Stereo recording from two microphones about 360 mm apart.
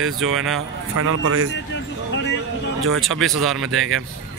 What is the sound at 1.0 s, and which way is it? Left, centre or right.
Speech, right.